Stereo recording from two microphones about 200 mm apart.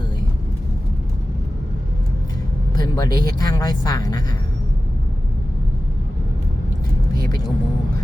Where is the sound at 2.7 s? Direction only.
20° left (ahead or behind).